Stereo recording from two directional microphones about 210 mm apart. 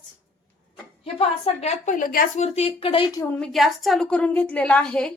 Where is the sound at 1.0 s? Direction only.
30° left (ahead or behind).